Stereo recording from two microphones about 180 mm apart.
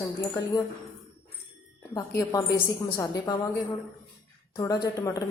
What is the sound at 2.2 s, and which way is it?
Speech, 15° left (ahead or behind).